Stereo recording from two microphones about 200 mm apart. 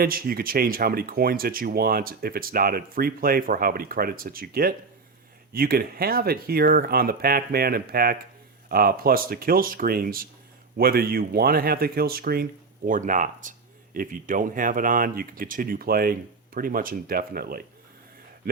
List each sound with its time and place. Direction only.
0.0 s speech: 50° right (ahead or behind)